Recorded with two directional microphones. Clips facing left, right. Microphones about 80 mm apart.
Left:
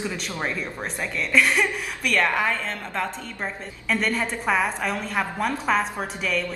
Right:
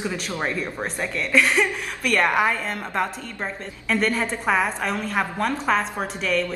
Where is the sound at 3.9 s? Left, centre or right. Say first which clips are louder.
Right 2 dB; centre.